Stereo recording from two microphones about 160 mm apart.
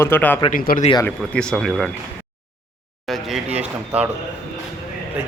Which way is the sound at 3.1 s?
Centre (ahead or behind).